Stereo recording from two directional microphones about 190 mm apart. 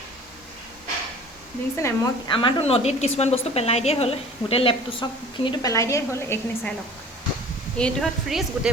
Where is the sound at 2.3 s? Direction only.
30° left (ahead or behind); by 6.4 s 15° left (ahead or behind).